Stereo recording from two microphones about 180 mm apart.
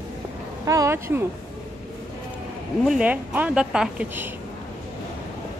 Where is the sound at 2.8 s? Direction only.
5° right (ahead or behind).